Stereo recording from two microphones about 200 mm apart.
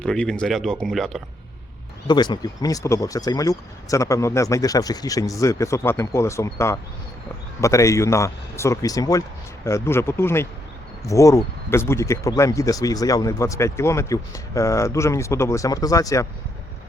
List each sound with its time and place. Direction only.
0.0 s speech: 5° left (ahead or behind)
2.0 s speech: 20° left (ahead or behind)